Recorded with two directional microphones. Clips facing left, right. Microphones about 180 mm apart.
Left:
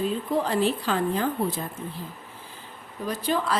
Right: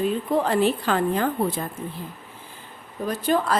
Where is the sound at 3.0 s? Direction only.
50° right (ahead or behind).